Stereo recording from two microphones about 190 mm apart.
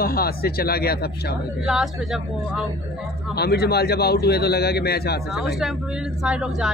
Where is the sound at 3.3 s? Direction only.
60° left (ahead or behind).